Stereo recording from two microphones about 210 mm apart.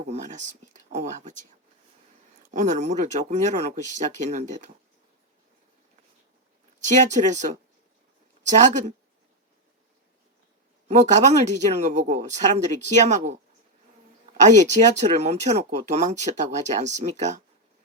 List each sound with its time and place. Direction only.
0.1 s speech: 35° right (ahead or behind)
2.5 s speech: 35° right (ahead or behind)
6.8 s speech: 35° right (ahead or behind)
8.4 s speech: 35° right (ahead or behind)
10.8 s speech: 35° right (ahead or behind)
14.4 s speech: 35° right (ahead or behind)